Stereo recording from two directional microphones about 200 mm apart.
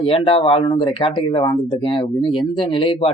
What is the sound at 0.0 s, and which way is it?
Speech, 25° left (ahead or behind).